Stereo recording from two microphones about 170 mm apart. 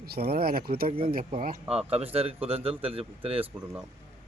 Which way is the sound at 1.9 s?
35° right (ahead or behind).